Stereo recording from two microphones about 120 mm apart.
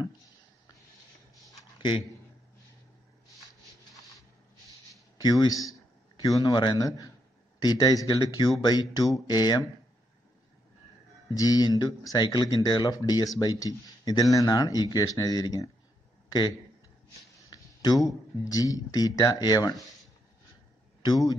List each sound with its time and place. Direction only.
1.8 s a man's voice: 40° left (ahead or behind)
4.9 s a man's voice: 30° left (ahead or behind)
11.3 s a man's voice: 30° left (ahead or behind)
17.5 s a sound: 30° left (ahead or behind)
18.4 s speech: 30° left (ahead or behind)
21.0 s speech: 30° left (ahead or behind)